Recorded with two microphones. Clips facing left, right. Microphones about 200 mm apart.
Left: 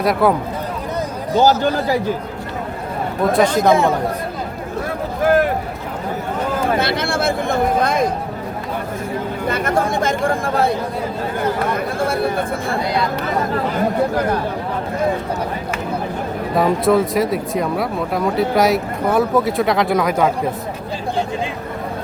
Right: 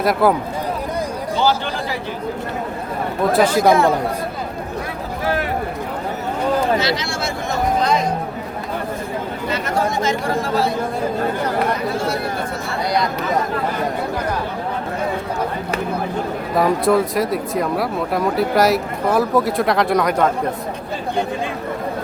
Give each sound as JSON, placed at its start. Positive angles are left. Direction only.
{"t": 0.0, "sound": "speech", "side_deg": 0}
{"t": 1.4, "sound": "speech", "side_deg": 40}
{"t": 3.3, "sound": "speech", "side_deg": -5}
{"t": 6.7, "sound": "speech", "side_deg": 55}
{"t": 9.5, "sound": "speech", "side_deg": 50}
{"t": 11.9, "sound": "speech", "side_deg": 55}
{"t": 16.6, "sound": "speech", "side_deg": 0}